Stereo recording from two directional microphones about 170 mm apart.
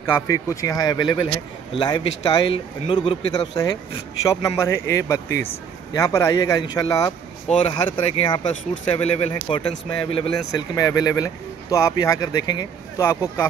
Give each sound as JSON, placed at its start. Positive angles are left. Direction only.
{"t": 0.3, "sound": "speech", "side_deg": 20}
{"t": 7.4, "sound": "speech", "side_deg": 40}
{"t": 7.7, "sound": "speech", "side_deg": 25}